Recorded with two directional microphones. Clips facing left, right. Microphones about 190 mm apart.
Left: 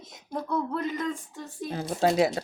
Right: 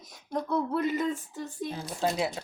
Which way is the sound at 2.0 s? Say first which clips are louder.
Left 6 dB; 90° left.